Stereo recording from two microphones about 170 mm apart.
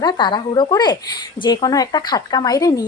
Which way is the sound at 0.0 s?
25° left (ahead or behind).